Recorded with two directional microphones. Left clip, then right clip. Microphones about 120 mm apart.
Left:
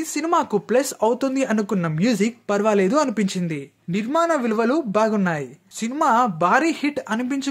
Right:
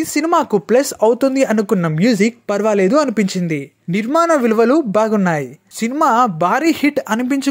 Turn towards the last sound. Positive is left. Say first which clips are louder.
# right 7 dB
turn(degrees=-55)  # may be behind; listen again after turning